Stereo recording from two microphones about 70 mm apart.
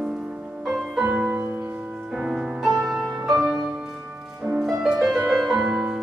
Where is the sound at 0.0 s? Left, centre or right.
Centre.